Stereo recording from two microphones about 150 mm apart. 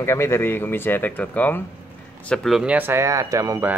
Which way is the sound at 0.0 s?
20° left (ahead or behind).